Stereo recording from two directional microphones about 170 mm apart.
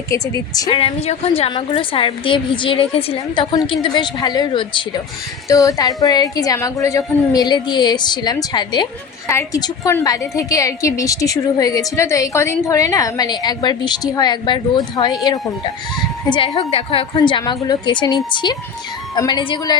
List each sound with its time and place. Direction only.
0.1 s a woman's voice: 20° left (ahead or behind)
0.8 s a woman's voice: 35° left (ahead or behind)